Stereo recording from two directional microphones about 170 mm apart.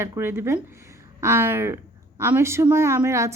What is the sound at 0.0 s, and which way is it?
A woman's voice, 15° right (ahead or behind).